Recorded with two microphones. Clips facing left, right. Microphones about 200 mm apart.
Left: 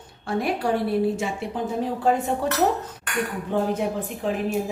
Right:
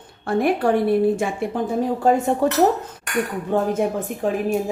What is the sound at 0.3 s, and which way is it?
A woman's voice, 50° right (ahead or behind).